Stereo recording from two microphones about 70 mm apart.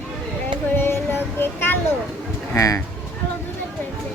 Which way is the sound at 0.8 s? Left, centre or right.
Left.